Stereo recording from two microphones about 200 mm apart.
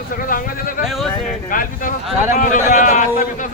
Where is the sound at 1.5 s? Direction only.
45° left (ahead or behind).